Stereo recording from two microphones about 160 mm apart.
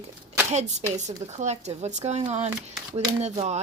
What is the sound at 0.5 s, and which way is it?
Speech, 45° right (ahead or behind).